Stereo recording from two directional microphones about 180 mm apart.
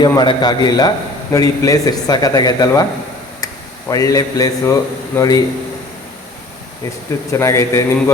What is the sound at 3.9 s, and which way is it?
A man's voice, 20° left (ahead or behind).